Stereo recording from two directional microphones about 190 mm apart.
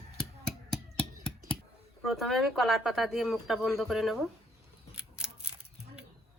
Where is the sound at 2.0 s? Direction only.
Centre (ahead or behind).